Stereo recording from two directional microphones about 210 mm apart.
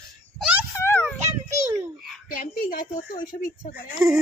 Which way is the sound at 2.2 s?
40° left (ahead or behind).